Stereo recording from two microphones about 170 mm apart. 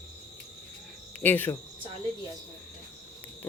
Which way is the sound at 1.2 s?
10° left (ahead or behind).